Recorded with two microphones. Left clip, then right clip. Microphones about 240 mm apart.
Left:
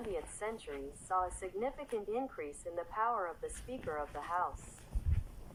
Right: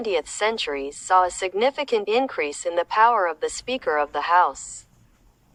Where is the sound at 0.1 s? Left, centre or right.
Right.